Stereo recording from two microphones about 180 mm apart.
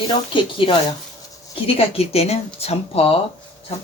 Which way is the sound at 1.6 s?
30° left (ahead or behind).